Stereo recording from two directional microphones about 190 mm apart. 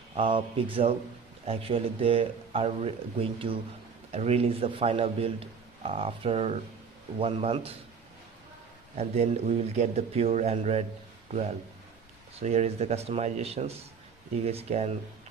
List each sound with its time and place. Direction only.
0.1 s a man's voice: 30° right (ahead or behind)
8.9 s a man's voice: 35° right (ahead or behind)
12.4 s a man's voice: 35° right (ahead or behind)